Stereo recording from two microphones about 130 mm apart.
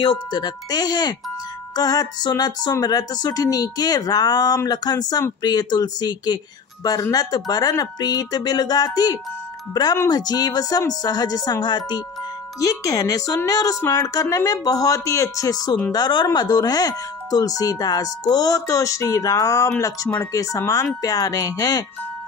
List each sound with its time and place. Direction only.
0.0 s speech: 35° left (ahead or behind)